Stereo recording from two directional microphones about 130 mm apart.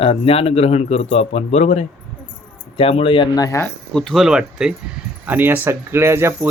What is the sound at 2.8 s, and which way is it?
Speech, 45° left (ahead or behind).